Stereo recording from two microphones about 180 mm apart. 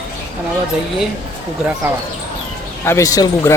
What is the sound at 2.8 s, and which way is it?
Speech, 15° left (ahead or behind).